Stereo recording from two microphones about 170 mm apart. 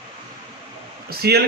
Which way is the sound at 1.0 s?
70° right (ahead or behind).